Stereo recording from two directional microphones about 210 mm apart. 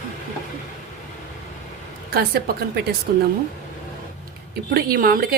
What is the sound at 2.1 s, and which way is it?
A woman's voice, 45° right (ahead or behind).